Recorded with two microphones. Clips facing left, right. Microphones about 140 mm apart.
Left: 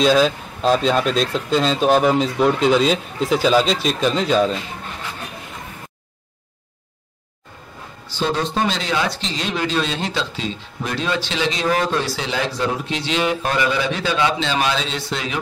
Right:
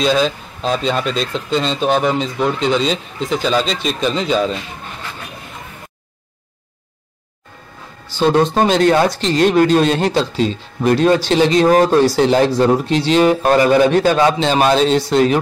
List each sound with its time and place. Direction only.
0.0 s speech: centre (ahead or behind)
8.3 s speech: 50° right (ahead or behind)